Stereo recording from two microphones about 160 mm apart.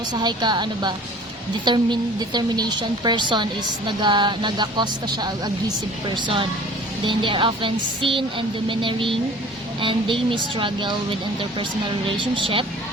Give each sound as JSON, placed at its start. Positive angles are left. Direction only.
{"t": 0.1, "sound": "a woman's voice", "side_deg": -25}